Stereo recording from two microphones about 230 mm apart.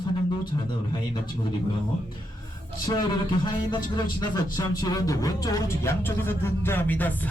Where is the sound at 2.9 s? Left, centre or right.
Centre.